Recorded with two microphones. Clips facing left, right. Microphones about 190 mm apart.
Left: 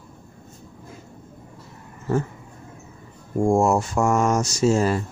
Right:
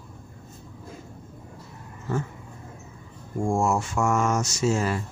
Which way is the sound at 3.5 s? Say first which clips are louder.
Left 5 dB; 40° left (ahead or behind).